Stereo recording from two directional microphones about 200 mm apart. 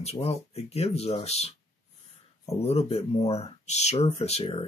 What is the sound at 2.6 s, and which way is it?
Speech, 30° left (ahead or behind).